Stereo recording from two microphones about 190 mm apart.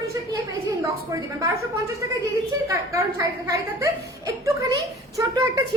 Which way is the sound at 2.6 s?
15° right (ahead or behind).